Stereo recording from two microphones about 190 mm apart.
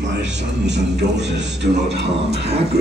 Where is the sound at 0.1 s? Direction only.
65° right (ahead or behind).